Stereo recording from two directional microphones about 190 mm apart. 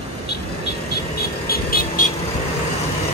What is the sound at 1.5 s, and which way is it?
Vehicle, 50° left (ahead or behind).